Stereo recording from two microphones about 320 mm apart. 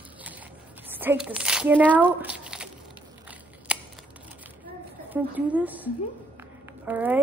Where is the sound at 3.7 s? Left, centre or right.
Centre.